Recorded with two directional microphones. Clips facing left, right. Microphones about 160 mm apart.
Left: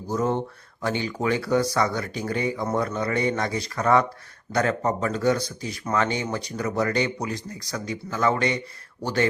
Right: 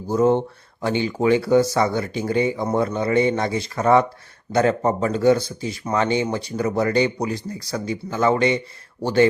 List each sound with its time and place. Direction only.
0.1 s speech: 30° right (ahead or behind)